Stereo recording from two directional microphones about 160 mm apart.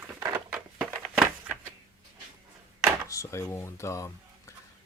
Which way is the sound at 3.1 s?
20° left (ahead or behind).